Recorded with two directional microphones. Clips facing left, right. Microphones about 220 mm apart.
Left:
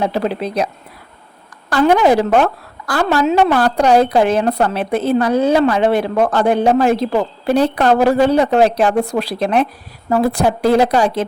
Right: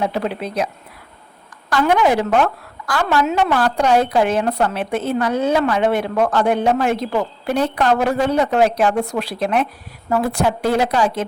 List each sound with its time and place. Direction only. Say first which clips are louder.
0.0 s a woman's voice: left 3 dB; 35° left (ahead or behind)
1.7 s a woman's voice: left 4 dB; 35° left (ahead or behind)